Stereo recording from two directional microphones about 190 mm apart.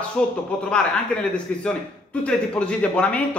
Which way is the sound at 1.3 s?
5° left (ahead or behind).